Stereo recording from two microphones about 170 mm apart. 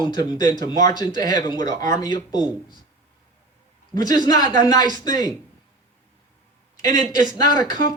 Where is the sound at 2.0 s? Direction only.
25° left (ahead or behind).